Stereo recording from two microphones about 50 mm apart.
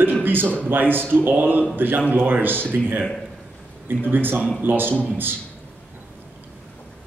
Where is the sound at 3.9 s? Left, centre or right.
Right.